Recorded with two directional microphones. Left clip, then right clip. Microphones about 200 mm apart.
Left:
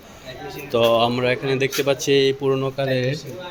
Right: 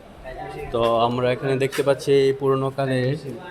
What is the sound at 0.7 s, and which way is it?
Speech, 10° left (ahead or behind).